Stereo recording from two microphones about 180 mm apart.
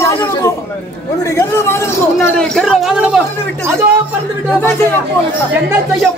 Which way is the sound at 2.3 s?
Centre (ahead or behind).